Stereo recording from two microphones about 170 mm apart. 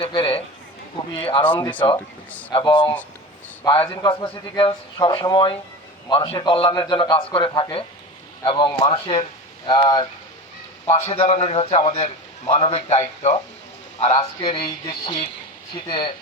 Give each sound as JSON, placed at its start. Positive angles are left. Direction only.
{"t": 0.0, "sound": "a man's voice", "side_deg": 30}
{"t": 15.0, "sound": "a man's voice", "side_deg": 30}